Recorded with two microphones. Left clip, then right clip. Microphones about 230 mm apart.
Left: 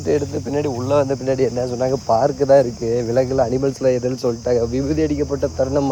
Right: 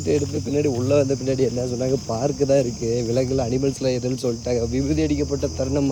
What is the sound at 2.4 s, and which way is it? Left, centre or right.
Speech, left.